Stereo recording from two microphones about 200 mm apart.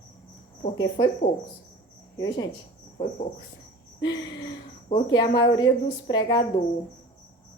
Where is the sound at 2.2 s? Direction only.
20° left (ahead or behind).